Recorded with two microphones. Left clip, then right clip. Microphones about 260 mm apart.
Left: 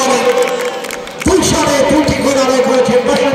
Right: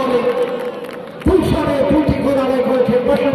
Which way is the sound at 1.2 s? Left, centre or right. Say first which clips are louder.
Left 4 dB; left.